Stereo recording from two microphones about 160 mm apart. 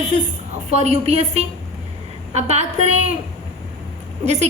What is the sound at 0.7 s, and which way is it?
A woman's voice, 40° right (ahead or behind).